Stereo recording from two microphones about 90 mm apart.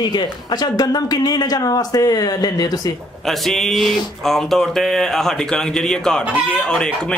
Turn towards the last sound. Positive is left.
turn(degrees=10)  # may be behind; listen again after turning